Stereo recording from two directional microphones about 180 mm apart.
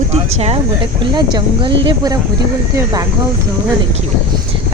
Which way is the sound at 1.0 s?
25° right (ahead or behind).